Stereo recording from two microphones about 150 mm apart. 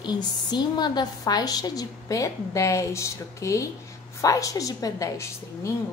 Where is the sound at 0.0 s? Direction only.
30° left (ahead or behind).